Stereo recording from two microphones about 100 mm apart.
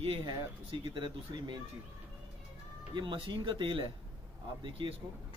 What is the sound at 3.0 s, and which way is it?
Speech, 55° right (ahead or behind).